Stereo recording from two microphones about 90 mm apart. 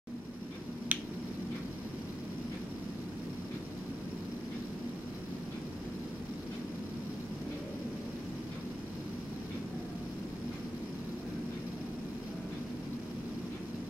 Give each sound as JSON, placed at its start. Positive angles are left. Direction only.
{"t": 0.9, "sound": "finger snapping", "side_deg": -20}